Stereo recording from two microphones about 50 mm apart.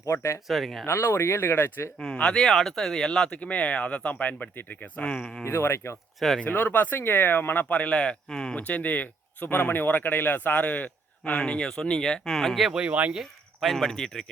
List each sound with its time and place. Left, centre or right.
0.0 s speech: left
0.4 s speech: centre
0.9 s speech: left
2.1 s speech: centre; by 4.4 s left
4.8 s speech: left
5.5 s speech: left
6.1 s speech: centre
6.4 s speech: left; by 8.5 s centre
8.5 s speech: left
11.2 s speech: left
12.7 s speech: centre
13.6 s speech: centre